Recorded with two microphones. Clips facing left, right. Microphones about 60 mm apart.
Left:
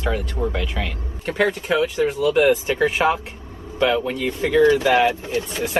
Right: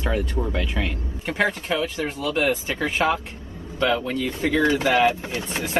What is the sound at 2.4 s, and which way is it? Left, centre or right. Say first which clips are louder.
Speech: left 6 dB; centre.